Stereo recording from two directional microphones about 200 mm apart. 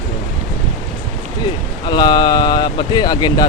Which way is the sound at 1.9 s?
20° left (ahead or behind).